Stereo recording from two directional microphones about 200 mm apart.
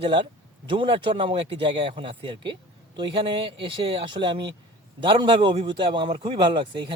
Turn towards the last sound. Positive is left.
turn(degrees=-25)  # may be behind; listen again after turning